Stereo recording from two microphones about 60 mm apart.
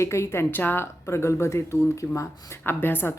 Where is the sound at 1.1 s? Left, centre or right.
Left.